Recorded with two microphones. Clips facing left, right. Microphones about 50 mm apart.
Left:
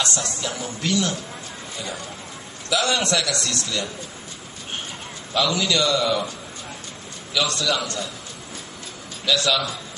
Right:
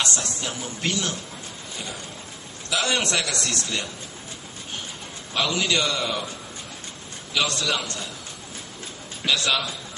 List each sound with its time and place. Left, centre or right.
0.1 s speech: left
0.4 s a man's voice: right
2.7 s a man's voice: right
5.3 s a man's voice: right
7.3 s a man's voice: right
9.2 s a man's voice: right